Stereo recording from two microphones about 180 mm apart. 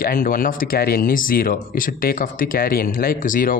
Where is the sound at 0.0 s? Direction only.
50° left (ahead or behind).